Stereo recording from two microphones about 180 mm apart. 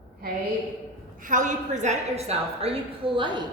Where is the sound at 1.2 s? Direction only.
45° right (ahead or behind); by 3.4 s 25° right (ahead or behind).